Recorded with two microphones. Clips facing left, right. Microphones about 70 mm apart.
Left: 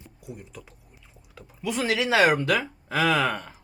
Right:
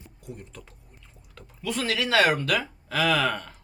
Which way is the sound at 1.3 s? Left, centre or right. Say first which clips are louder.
Left 2 dB; centre.